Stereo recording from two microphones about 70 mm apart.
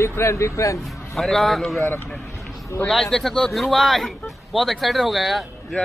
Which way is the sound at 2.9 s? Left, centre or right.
Centre.